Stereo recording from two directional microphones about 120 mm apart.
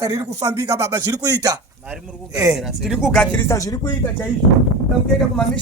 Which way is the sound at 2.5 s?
5° right (ahead or behind).